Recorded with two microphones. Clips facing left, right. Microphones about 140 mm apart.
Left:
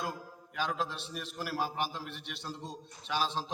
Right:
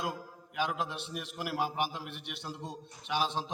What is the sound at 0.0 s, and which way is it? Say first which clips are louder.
A man's voice: right 1 dB; 15° right (ahead or behind).